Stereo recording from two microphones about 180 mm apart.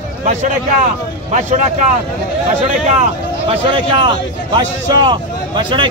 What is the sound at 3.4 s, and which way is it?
Speech, 30° right (ahead or behind).